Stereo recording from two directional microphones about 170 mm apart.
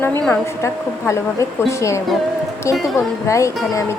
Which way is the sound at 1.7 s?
15° left (ahead or behind).